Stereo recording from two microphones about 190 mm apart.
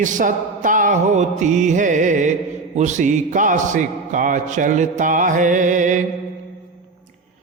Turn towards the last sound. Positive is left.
turn(degrees=-40)  # may be behind; listen again after turning